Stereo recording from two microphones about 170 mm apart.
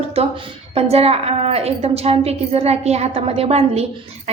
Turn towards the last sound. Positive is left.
turn(degrees=-35)  # may be behind; listen again after turning